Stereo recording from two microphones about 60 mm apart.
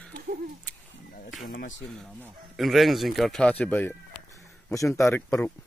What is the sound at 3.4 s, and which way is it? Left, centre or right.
Speech, left.